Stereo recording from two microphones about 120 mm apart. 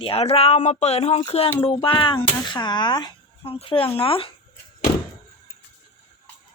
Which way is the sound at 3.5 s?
50° left (ahead or behind).